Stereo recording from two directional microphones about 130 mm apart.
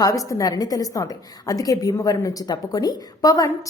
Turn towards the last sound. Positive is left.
turn(degrees=30)  # may be behind; listen again after turning